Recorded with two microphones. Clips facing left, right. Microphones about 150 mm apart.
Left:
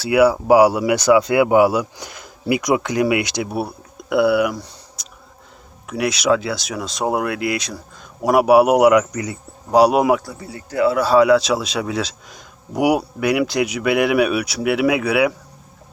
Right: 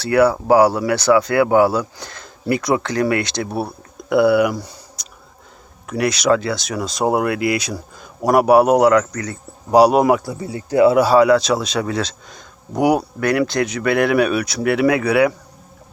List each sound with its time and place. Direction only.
0.0 s a man's voice: 10° left (ahead or behind)
9.7 s a man's voice: centre (ahead or behind)
10.4 s speech: 20° right (ahead or behind)
11.0 s a man's voice: centre (ahead or behind)